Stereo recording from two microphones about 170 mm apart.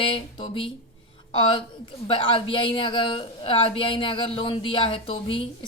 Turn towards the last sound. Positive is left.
turn(degrees=30)  # may be behind; listen again after turning